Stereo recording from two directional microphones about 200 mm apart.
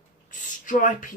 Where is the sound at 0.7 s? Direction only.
40° left (ahead or behind).